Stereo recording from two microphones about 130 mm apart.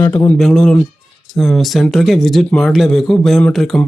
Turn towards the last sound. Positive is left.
turn(degrees=0)  # may be behind; listen again after turning